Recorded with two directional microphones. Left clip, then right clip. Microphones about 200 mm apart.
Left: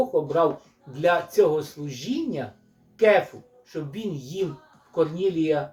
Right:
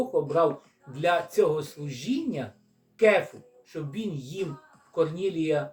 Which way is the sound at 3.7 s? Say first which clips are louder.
Left 3 dB; centre (ahead or behind).